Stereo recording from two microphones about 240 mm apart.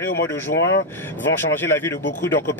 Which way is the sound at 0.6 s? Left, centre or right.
Left.